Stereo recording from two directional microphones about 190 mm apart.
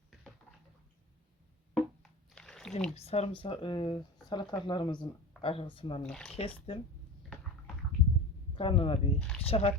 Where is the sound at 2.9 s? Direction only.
35° left (ahead or behind).